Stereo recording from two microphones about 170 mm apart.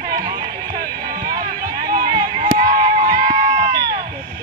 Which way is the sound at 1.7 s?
20° right (ahead or behind).